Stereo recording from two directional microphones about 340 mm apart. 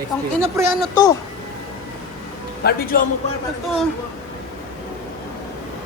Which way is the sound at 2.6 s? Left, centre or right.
Left.